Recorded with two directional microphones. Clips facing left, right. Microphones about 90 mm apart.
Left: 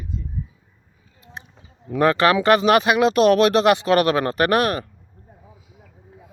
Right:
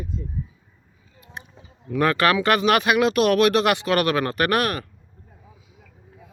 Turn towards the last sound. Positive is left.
turn(degrees=30)  # may be behind; listen again after turning